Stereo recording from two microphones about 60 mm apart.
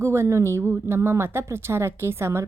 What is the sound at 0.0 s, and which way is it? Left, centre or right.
A woman's voice, right.